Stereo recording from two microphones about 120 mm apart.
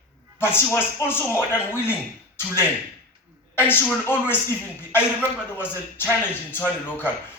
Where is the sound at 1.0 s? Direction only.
25° left (ahead or behind).